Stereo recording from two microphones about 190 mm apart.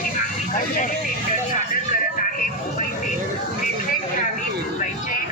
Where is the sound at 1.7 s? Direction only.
45° left (ahead or behind).